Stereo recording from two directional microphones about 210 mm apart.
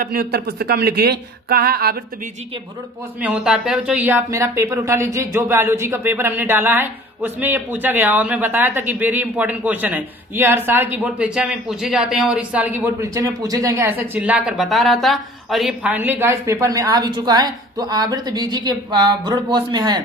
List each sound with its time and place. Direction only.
0.0 s speech: 45° right (ahead or behind)
3.2 s speech: 5° right (ahead or behind); by 20.0 s 20° right (ahead or behind)